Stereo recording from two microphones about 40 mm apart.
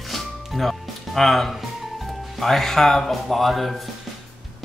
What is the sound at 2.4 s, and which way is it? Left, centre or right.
Speech, centre.